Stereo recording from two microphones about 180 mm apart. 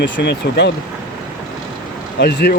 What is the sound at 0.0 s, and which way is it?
Speech, 70° left (ahead or behind).